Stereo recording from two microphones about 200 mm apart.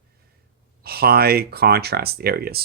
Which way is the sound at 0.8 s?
50° right (ahead or behind).